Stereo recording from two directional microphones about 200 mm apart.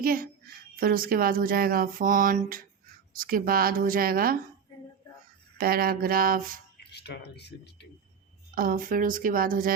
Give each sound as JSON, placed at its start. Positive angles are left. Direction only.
{"t": 0.0, "sound": "speech", "side_deg": -45}
{"t": 5.5, "sound": "speech", "side_deg": -50}
{"t": 6.7, "sound": "speech", "side_deg": 55}
{"t": 8.5, "sound": "speech", "side_deg": -45}